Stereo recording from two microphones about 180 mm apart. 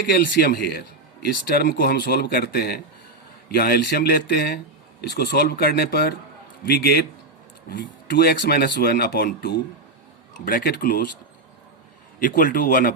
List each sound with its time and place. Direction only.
0.1 s a man's voice: 65° left (ahead or behind)
12.2 s a man's voice: 50° left (ahead or behind)